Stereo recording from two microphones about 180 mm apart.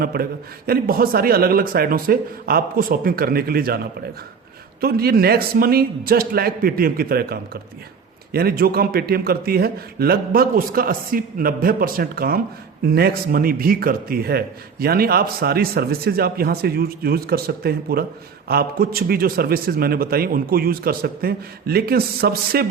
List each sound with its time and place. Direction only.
0.0 s speech: 55° right (ahead or behind)
4.8 s speech: 60° right (ahead or behind)